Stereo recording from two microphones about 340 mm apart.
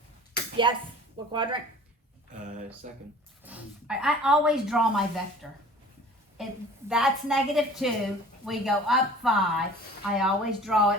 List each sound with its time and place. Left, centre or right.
0.6 s speech: centre
2.8 s speech: right
3.4 s a woman's voice: centre